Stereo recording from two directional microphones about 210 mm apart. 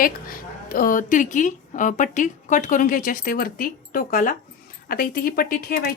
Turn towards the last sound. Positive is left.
turn(degrees=45)  # may be behind; listen again after turning